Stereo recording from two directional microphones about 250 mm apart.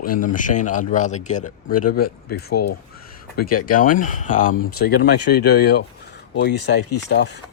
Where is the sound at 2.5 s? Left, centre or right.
Left.